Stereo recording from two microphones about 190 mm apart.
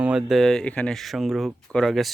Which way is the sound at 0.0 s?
5° right (ahead or behind).